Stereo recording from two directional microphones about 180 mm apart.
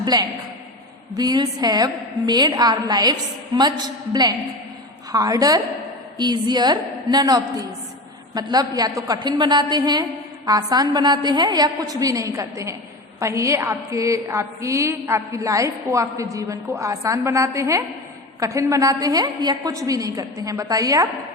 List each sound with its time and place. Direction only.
0.0 s a man's voice: 20° right (ahead or behind)